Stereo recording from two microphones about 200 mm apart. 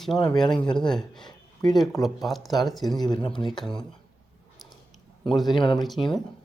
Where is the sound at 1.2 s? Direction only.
20° left (ahead or behind).